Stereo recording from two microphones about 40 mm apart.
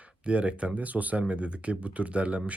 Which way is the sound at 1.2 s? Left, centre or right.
Right.